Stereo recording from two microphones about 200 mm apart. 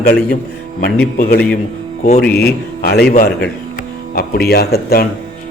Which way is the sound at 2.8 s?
50° left (ahead or behind).